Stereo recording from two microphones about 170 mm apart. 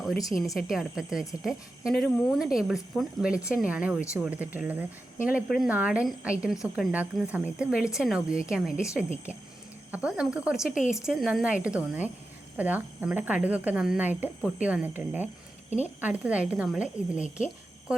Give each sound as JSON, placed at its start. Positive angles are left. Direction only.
{"t": 0.5, "sound": "a woman's voice", "side_deg": -5}
{"t": 10.7, "sound": "speech", "side_deg": 50}
{"t": 10.9, "sound": "a woman's voice", "side_deg": -5}